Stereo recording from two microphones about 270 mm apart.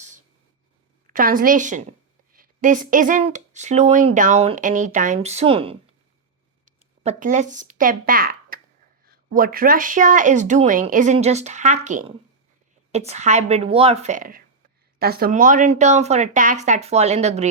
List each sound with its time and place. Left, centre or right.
1.1 s a woman's voice: right